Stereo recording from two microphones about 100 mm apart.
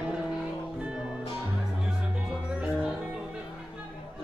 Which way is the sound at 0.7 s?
10° right (ahead or behind).